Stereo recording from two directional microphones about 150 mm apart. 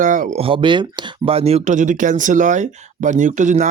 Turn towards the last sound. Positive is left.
turn(degrees=-55)  # may be behind; listen again after turning